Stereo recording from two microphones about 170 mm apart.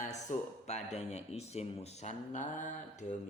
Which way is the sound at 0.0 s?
45° left (ahead or behind).